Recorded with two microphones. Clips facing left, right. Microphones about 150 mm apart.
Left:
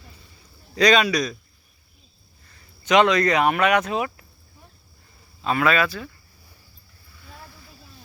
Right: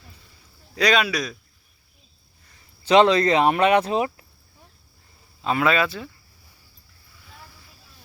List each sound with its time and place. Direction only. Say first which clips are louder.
0.8 s speech: left 3 dB; 5° right (ahead or behind)
2.8 s speech: right 2 dB; 30° right (ahead or behind)
5.4 s speech: even; 20° right (ahead or behind)